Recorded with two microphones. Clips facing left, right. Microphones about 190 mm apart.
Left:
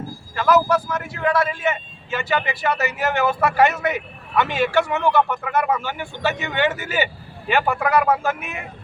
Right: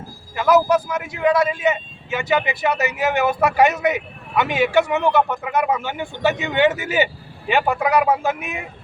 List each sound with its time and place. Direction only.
0.3 s speech: 20° right (ahead or behind)